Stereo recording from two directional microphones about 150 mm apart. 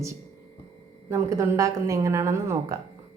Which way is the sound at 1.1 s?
20° right (ahead or behind).